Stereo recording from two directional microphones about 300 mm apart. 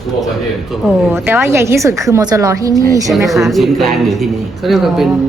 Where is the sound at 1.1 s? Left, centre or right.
Centre.